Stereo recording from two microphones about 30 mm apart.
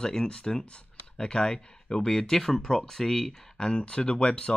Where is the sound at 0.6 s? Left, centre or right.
Left; by 3.5 s centre.